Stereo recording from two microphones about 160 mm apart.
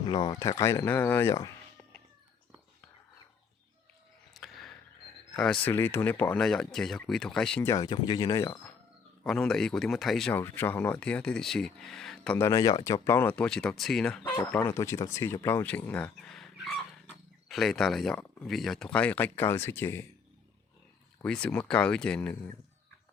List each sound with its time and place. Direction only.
0.0 s speech: 30° left (ahead or behind)
0.3 s speech: 20° left (ahead or behind)
4.4 s a sound: centre (ahead or behind)
5.4 s speech: 5° left (ahead or behind)
7.6 s speech: 20° left (ahead or behind)
9.2 s speech: 5° left (ahead or behind)
10.3 s speech: 10° left (ahead or behind)
12.4 s speech: 20° left (ahead or behind)
21.2 s speech: 5° left (ahead or behind)